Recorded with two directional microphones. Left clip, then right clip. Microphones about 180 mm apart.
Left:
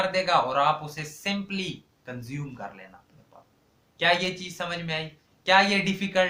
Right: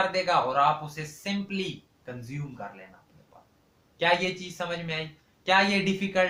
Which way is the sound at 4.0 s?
10° left (ahead or behind).